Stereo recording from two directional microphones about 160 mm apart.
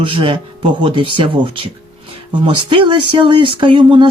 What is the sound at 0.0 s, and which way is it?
Speech, 30° right (ahead or behind).